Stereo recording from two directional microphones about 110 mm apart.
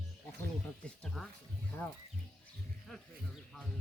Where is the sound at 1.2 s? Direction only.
5° left (ahead or behind).